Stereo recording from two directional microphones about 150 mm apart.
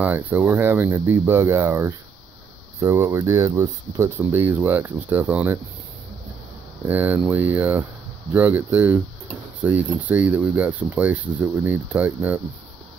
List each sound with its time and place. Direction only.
0.0 s speech: 10° right (ahead or behind)
6.9 s speech: 10° right (ahead or behind)